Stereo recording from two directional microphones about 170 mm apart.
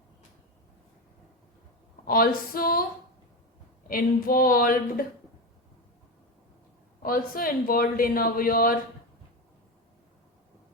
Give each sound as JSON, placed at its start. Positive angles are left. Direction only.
{"t": 2.0, "sound": "speech", "side_deg": 60}
{"t": 3.8, "sound": "speech", "side_deg": 55}
{"t": 7.0, "sound": "speech", "side_deg": 55}